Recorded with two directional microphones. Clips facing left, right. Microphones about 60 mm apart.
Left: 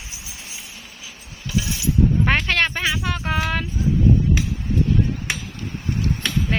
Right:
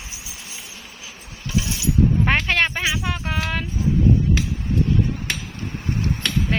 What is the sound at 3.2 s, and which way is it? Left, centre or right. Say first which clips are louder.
Child singing: left 5 dB; centre.